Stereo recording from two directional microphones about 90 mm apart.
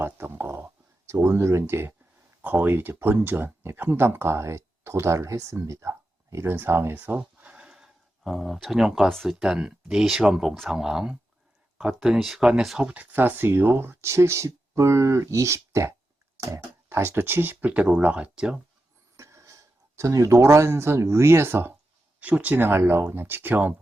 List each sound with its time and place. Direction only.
0.0 s a sound: 25° right (ahead or behind)
2.4 s speech: 20° right (ahead or behind)
19.1 s speech: 35° right (ahead or behind)